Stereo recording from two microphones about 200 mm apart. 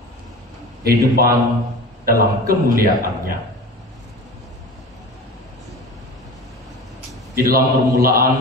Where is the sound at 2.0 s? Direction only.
45° right (ahead or behind).